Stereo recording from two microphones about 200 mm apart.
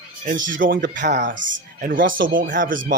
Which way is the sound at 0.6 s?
45° right (ahead or behind).